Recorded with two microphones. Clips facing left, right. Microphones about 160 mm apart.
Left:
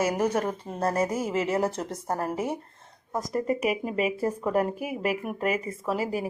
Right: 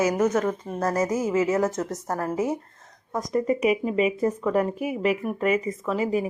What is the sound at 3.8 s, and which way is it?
Speech, 20° left (ahead or behind).